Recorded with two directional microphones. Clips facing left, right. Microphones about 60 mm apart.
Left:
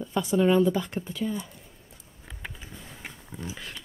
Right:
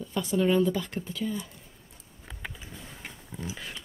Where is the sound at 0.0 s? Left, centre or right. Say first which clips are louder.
Left 3 dB; centre.